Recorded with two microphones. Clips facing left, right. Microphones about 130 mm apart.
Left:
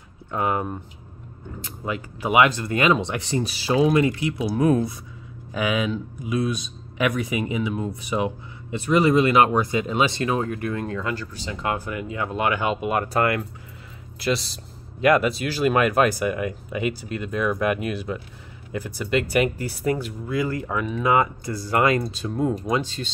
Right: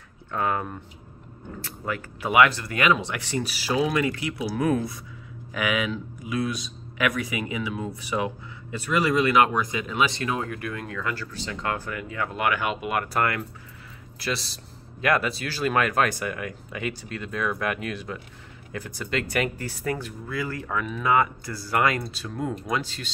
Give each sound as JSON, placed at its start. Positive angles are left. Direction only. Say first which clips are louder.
{"t": 0.3, "sound": "speech", "louder": "left 2 dB", "side_deg": 20}
{"t": 15.0, "sound": "speech", "louder": "left 5 dB", "side_deg": 20}